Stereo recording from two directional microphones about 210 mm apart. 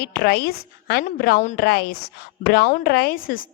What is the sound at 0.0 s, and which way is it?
A woman's voice, 50° left (ahead or behind).